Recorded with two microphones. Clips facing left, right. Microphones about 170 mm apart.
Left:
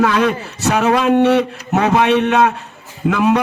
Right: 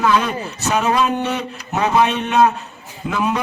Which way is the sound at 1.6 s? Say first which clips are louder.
Left 2 dB; 60° left (ahead or behind).